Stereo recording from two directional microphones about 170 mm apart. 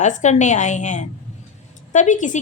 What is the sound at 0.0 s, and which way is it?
Speech, 45° left (ahead or behind).